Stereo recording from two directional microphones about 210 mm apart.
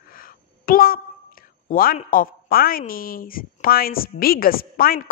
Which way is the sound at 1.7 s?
40° left (ahead or behind).